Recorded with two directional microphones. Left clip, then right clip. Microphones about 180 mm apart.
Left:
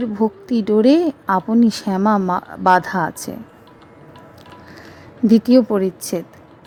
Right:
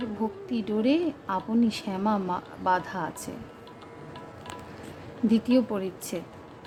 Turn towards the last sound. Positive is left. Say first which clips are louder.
# left 12 dB
turn(degrees=40)  # may be behind; listen again after turning